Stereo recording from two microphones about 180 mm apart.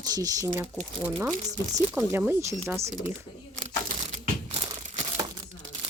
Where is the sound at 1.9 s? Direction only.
10° right (ahead or behind).